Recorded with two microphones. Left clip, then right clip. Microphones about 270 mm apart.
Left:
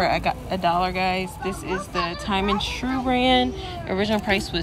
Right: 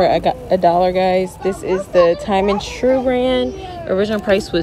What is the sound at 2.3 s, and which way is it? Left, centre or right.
Speech, centre.